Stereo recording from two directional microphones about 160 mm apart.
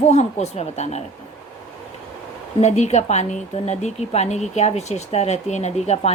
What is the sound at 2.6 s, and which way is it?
A woman's voice, 45° left (ahead or behind).